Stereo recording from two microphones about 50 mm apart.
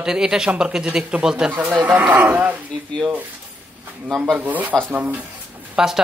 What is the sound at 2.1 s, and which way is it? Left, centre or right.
Speech, right.